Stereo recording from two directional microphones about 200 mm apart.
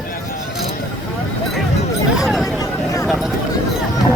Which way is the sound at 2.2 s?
Centre (ahead or behind).